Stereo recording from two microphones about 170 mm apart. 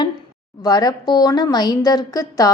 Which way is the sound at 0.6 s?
20° left (ahead or behind).